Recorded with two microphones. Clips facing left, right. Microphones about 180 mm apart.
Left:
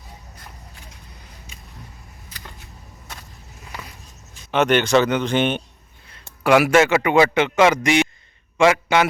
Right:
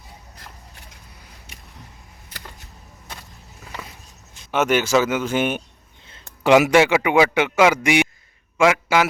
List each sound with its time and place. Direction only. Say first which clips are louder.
4.5 s speech: left 2 dB; 5° right (ahead or behind)
6.1 s a man's voice: right 1 dB; 25° right (ahead or behind); by 9.0 s 5° right (ahead or behind)